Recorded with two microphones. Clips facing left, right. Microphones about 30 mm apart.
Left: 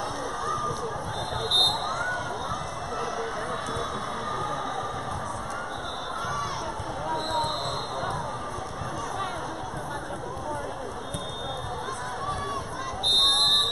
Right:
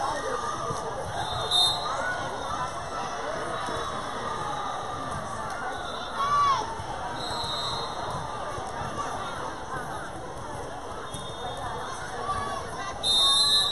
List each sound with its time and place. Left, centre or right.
0.0 s a sound: centre
1.3 s basketball bounce: centre
4.3 s crowd: centre
6.2 s crowd: centre
13.0 s fire alarm: centre